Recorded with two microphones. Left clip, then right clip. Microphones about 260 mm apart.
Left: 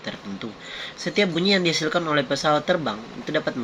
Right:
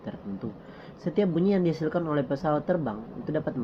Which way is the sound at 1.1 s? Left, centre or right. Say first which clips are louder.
Left 5 dB; centre.